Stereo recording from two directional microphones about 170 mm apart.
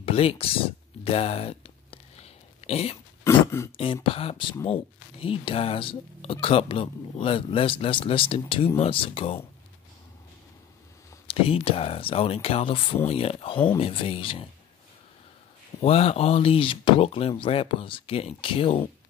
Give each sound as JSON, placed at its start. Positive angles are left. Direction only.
{"t": 0.0, "sound": "a sound", "side_deg": 35}
{"t": 3.3, "sound": "speech", "side_deg": 15}
{"t": 3.7, "sound": "speech", "side_deg": 30}
{"t": 11.2, "sound": "speech", "side_deg": 35}
{"t": 15.8, "sound": "speech", "side_deg": 35}